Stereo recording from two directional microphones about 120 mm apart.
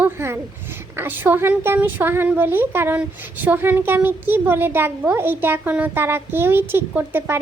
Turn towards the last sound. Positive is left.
turn(degrees=-20)  # may be behind; listen again after turning